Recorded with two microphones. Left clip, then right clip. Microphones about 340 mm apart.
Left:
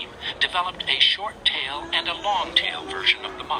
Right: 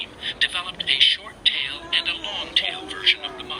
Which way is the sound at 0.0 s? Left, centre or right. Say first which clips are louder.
Right 1 dB; centre.